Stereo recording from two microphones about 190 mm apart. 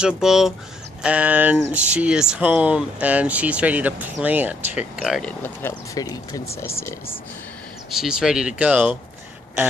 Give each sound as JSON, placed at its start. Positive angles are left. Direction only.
{"t": 0.0, "sound": "speech", "side_deg": -5}
{"t": 5.4, "sound": "speech", "side_deg": 15}
{"t": 7.9, "sound": "speech", "side_deg": 0}